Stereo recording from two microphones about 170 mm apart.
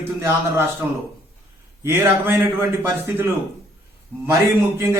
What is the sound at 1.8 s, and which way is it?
Speech, 15° right (ahead or behind).